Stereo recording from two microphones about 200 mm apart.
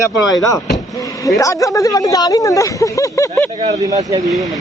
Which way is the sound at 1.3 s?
15° left (ahead or behind).